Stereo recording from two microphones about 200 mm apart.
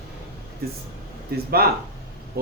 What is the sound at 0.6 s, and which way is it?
Speech, 50° right (ahead or behind).